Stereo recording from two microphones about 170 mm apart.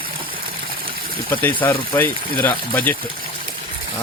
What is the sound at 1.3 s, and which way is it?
Speech, 15° left (ahead or behind).